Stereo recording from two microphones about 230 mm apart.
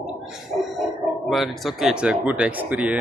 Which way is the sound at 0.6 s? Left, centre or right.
Centre.